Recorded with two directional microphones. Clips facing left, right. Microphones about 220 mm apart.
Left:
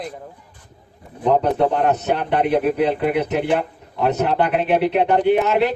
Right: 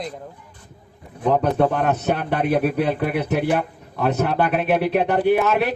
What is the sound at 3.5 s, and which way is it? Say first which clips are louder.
Speech: left 1 dB; 20° left (ahead or behind).